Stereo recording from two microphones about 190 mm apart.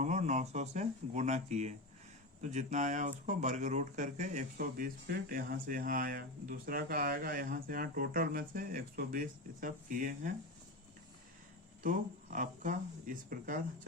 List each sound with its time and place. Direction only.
0.0 s speech: 35° right (ahead or behind)
11.8 s speech: 45° right (ahead or behind)